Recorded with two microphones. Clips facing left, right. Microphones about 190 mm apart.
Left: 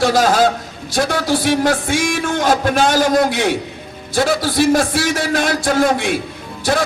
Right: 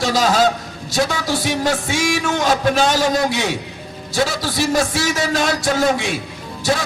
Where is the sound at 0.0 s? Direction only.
55° left (ahead or behind).